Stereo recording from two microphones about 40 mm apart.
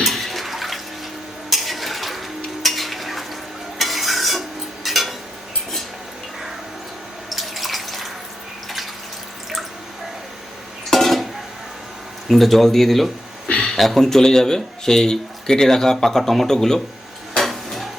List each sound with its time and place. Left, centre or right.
0.0 s bathtub: centre
1.5 s a sound: centre
2.6 s stir: centre
7.3 s bathtub: centre
10.8 s music: centre
12.3 s speech: centre
13.5 s a sound: left
13.7 s speech: centre
14.1 s speech: centre
17.3 s dishes: centre